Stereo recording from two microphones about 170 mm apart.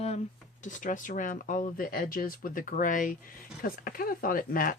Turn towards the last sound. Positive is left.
turn(degrees=55)  # may be behind; listen again after turning